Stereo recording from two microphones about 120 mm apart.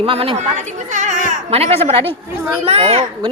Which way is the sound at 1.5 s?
60° right (ahead or behind).